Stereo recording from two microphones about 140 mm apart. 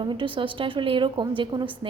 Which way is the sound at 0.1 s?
35° right (ahead or behind).